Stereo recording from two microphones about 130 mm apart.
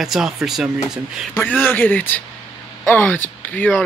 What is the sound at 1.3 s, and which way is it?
Speech, 15° left (ahead or behind).